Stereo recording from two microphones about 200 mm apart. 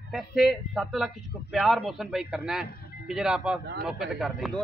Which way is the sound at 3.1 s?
5° right (ahead or behind).